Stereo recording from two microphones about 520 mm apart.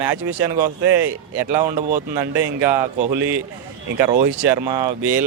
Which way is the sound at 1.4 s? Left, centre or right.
Centre.